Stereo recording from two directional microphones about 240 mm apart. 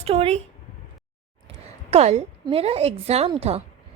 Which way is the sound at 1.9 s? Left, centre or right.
Right.